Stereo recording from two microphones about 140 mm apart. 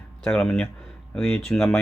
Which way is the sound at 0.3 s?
5° left (ahead or behind).